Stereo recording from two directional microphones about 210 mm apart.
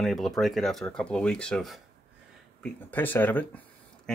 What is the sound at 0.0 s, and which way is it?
Speech, centre (ahead or behind).